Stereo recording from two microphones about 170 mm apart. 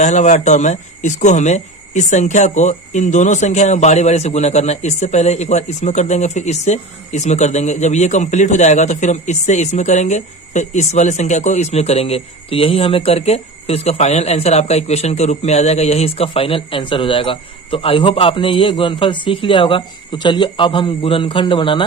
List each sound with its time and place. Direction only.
0.0 s speech: 45° left (ahead or behind)